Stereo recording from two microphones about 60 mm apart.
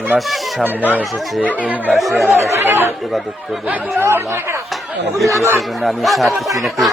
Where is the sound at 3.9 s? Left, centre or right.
Right.